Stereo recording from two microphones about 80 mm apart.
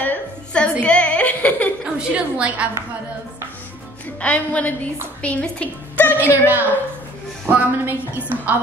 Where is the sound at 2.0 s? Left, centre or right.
Centre.